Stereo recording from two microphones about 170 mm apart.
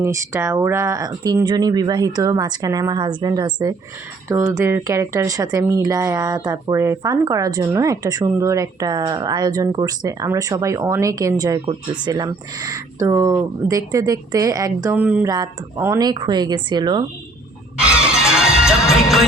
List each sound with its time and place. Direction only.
0.0 s speech: 15° right (ahead or behind)
15.3 s speech: 20° right (ahead or behind)
17.7 s music: 5° right (ahead or behind)